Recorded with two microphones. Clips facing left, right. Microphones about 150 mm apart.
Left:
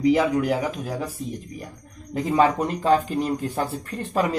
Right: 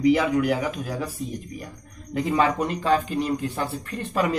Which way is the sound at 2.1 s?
35° left (ahead or behind).